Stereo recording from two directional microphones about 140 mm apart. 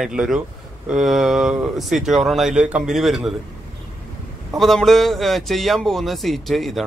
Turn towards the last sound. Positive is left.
turn(degrees=0)  # may be behind; listen again after turning